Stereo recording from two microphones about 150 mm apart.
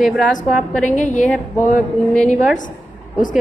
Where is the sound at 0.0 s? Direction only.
60° left (ahead or behind).